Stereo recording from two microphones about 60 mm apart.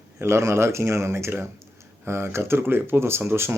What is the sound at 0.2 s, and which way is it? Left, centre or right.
Speech, right.